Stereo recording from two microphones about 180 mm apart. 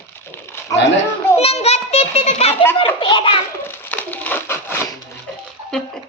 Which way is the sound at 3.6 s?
10° left (ahead or behind).